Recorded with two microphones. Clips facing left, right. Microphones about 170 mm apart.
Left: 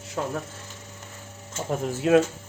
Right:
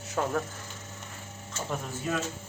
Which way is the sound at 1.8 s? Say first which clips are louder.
Left 16 dB; 75° left (ahead or behind).